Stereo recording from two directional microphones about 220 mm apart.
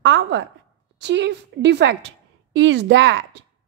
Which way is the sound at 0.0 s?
55° right (ahead or behind).